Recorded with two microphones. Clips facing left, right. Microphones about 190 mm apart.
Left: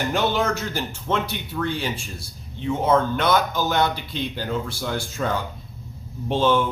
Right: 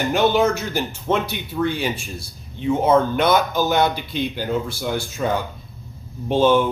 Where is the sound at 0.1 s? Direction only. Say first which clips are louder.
Right 7 dB; 20° right (ahead or behind).